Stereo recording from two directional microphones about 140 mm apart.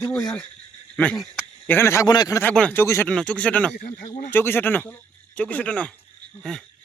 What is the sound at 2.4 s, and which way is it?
Speech, 10° left (ahead or behind).